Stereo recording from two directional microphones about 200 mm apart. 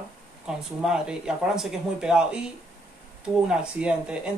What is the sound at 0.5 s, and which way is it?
Speech, 5° right (ahead or behind).